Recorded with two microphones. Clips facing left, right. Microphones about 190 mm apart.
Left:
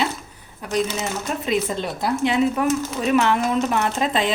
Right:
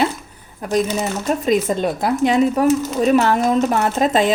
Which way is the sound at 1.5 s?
45° right (ahead or behind).